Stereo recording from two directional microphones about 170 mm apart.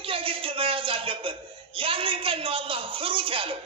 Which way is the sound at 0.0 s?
30° right (ahead or behind).